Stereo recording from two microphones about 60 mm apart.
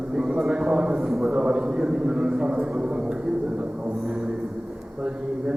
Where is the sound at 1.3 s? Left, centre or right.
Centre.